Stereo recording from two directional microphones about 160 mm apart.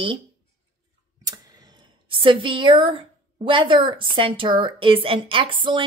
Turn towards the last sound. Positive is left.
turn(degrees=-30)  # may be behind; listen again after turning